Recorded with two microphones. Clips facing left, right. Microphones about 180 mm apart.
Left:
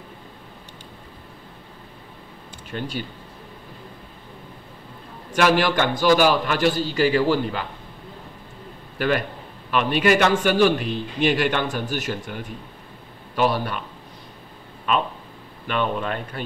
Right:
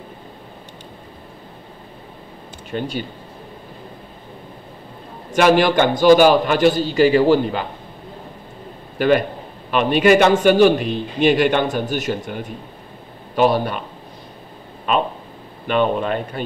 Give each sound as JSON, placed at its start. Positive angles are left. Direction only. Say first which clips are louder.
{"t": 2.7, "sound": "a man's voice", "louder": "right 5 dB", "side_deg": -20}
{"t": 5.3, "sound": "a man's voice", "louder": "right 5 dB", "side_deg": -20}
{"t": 8.9, "sound": "a man's voice", "louder": "right 7 dB", "side_deg": -25}
{"t": 15.6, "sound": "a man's voice", "louder": "right 6 dB", "side_deg": -20}